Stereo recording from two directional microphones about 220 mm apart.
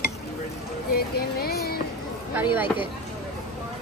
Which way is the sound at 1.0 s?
45° left (ahead or behind).